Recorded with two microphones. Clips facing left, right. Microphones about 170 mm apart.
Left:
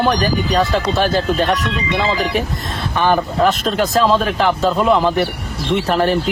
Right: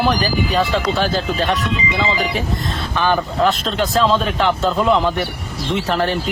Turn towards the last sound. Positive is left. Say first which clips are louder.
# left 2 dB
turn(degrees=0)  # may be behind; listen again after turning